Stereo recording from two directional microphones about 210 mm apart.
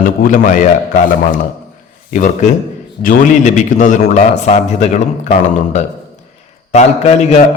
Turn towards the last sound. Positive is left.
turn(degrees=30)  # may be behind; listen again after turning